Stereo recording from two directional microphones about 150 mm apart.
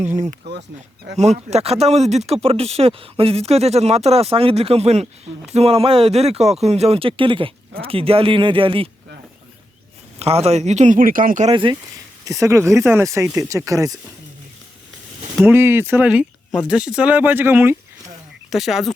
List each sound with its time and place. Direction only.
0.2 s speech: 50° right (ahead or behind)
10.2 s speech: 45° right (ahead or behind); by 11.4 s 65° right (ahead or behind)
11.4 s speech: 35° right (ahead or behind)
12.2 s speech: 20° right (ahead or behind)
15.4 s speech: 15° right (ahead or behind)
18.5 s speech: centre (ahead or behind)